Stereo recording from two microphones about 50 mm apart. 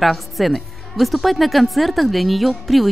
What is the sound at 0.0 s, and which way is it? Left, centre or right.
A woman's voice, centre.